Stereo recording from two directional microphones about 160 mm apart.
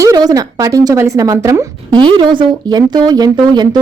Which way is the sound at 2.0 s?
30° right (ahead or behind).